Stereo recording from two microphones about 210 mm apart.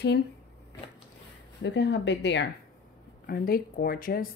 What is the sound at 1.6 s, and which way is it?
Speech, 55° left (ahead or behind).